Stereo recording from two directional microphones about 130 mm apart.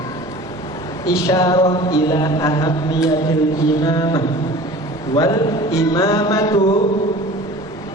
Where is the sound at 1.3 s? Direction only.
25° left (ahead or behind).